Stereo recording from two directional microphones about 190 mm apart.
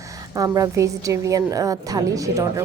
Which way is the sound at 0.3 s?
20° right (ahead or behind).